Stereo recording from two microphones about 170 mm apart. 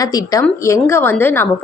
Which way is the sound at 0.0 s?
20° left (ahead or behind).